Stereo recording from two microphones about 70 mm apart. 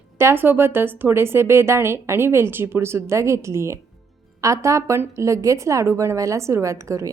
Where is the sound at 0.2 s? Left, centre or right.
Right.